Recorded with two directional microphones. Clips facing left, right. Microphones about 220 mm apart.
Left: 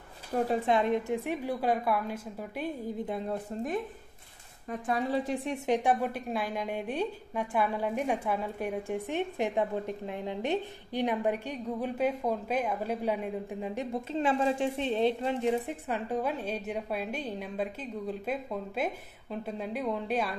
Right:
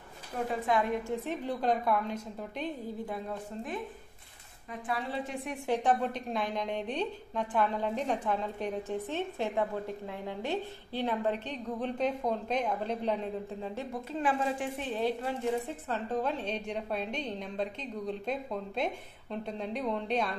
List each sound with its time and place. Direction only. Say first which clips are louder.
0.3 s speech: left 5 dB; 45° left (ahead or behind)
0.7 s a woman's voice: left 3 dB; 20° left (ahead or behind); by 2.7 s 5° left (ahead or behind)
4.6 s speech: left 5 dB; 45° left (ahead or behind)
5.7 s a woman's voice: left 1 dB; 10° left (ahead or behind)